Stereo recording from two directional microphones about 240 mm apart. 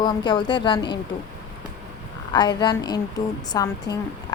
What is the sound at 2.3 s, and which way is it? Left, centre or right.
Speech, centre.